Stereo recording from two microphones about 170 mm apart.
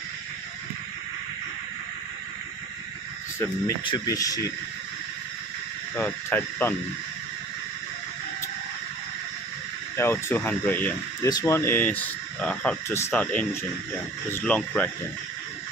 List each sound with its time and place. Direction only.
3.8 s speech: 25° left (ahead or behind)
5.9 s speech: 10° left (ahead or behind)
9.9 s speech: 15° left (ahead or behind)